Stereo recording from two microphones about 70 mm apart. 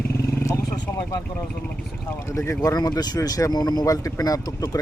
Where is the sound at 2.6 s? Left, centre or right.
Left.